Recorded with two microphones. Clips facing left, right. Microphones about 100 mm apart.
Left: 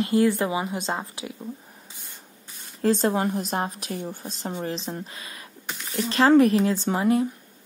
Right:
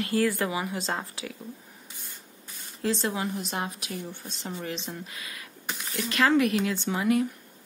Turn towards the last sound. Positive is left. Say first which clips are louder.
# left 3 dB
turn(degrees=35)  # may be behind; listen again after turning